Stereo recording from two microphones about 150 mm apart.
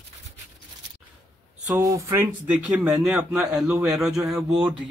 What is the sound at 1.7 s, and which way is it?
Speech, 20° right (ahead or behind).